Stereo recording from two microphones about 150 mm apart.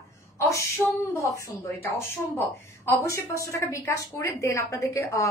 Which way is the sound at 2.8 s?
20° left (ahead or behind).